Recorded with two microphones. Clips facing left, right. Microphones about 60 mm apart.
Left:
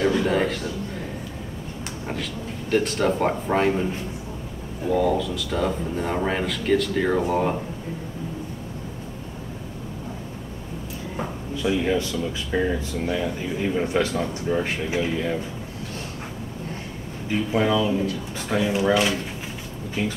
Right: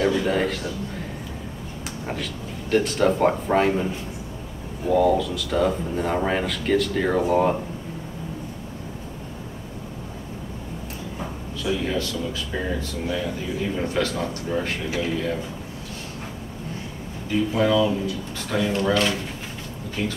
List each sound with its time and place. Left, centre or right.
0.0 s a sound: centre
2.7 s speech: centre
4.8 s speech: centre
11.6 s speech: centre
17.5 s speech: centre